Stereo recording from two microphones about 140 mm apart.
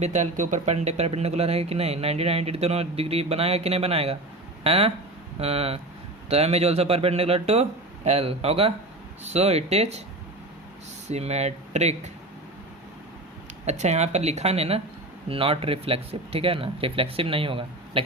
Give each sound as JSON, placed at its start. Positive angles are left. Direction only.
{"t": 0.0, "sound": "speech", "side_deg": -60}
{"t": 11.1, "sound": "speech", "side_deg": -50}
{"t": 13.7, "sound": "speech", "side_deg": -55}